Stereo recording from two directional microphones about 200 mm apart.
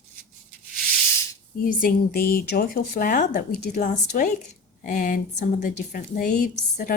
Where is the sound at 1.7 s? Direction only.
45° left (ahead or behind).